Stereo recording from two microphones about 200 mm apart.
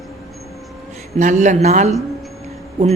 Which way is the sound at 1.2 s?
35° right (ahead or behind).